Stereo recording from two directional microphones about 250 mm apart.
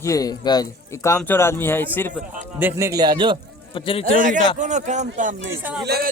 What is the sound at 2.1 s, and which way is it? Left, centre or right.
A man's voice, centre.